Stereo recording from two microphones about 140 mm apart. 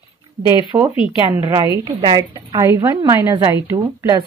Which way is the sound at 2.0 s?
30° right (ahead or behind).